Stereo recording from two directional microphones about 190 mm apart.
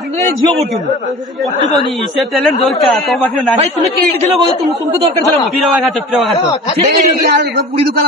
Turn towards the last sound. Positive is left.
turn(degrees=0)  # may be behind; listen again after turning